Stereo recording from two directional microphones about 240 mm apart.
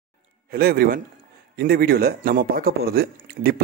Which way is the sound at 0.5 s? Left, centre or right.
Right.